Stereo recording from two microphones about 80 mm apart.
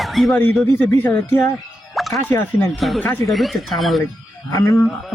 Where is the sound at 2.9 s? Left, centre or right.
Left.